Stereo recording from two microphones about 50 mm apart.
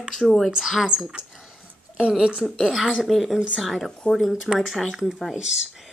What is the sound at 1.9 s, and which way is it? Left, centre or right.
Speech, right.